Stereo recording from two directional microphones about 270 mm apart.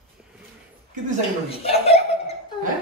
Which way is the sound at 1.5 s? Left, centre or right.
Left.